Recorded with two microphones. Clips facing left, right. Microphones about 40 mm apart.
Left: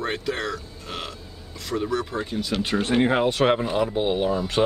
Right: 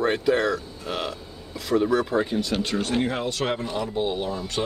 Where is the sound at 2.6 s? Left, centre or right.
Left.